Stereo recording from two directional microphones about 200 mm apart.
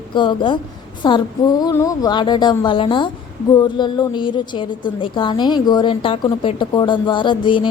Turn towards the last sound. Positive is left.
turn(degrees=25)  # may be behind; listen again after turning